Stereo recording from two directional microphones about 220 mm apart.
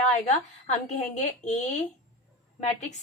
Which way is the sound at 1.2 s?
30° left (ahead or behind).